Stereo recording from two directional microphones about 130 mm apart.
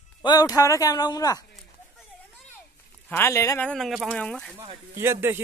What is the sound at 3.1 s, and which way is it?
Speech, 20° left (ahead or behind).